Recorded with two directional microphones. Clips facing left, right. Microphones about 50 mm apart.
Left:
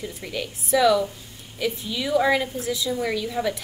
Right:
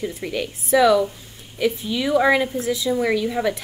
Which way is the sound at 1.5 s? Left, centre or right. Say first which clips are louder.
Right 5 dB; right.